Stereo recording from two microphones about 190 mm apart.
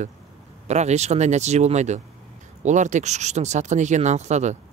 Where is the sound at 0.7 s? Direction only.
35° right (ahead or behind).